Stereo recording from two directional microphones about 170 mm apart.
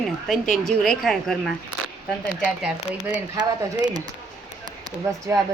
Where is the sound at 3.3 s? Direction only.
25° right (ahead or behind).